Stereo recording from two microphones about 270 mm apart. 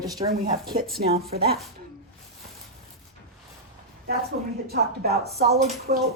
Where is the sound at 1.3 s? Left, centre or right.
Right.